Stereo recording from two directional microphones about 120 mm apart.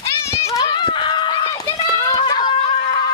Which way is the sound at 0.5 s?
40° left (ahead or behind).